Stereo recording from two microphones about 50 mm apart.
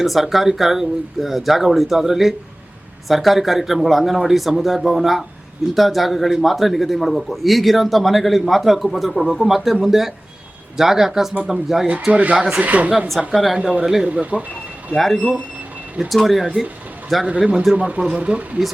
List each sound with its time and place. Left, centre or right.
0.0 s a man's voice: centre
12.1 s speech: right
12.4 s speech: centre
12.6 s a woman's voice: right
13.1 s a man's voice: centre
13.6 s speech: centre
14.1 s speech: right
14.9 s a man's voice: centre
17.7 s speech: right